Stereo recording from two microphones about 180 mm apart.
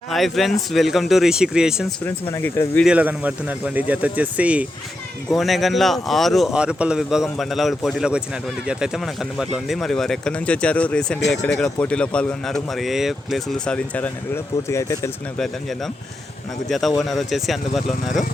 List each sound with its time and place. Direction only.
0.1 s speech: centre (ahead or behind)
2.3 s speech: 15° left (ahead or behind)
2.8 s speech: 5° right (ahead or behind); by 15.1 s 15° left (ahead or behind)
16.6 s speech: centre (ahead or behind)